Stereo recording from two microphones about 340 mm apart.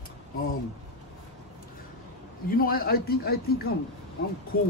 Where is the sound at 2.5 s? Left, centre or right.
Left.